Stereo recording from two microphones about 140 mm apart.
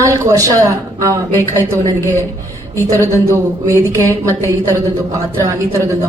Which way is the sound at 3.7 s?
20° right (ahead or behind).